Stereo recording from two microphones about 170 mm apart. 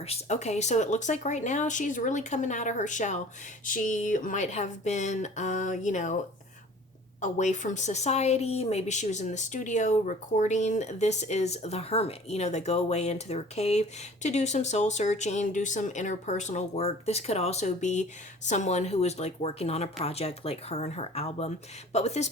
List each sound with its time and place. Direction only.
0.0 s speech: 40° left (ahead or behind)
7.2 s speech: 45° left (ahead or behind)